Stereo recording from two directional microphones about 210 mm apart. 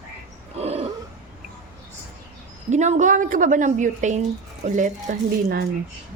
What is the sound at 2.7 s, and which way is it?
A woman's voice, 35° right (ahead or behind).